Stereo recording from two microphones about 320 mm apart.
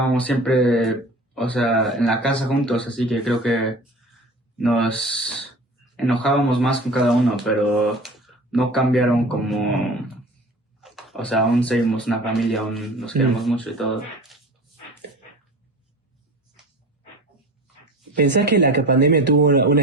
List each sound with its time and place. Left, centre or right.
0.0 s speech: centre
18.2 s speech: right